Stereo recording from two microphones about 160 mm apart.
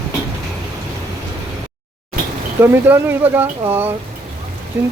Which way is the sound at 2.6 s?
15° right (ahead or behind).